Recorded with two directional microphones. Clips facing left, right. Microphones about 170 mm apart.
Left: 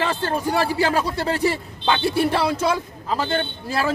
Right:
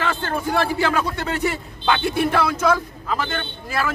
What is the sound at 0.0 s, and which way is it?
A man's voice, 35° left (ahead or behind).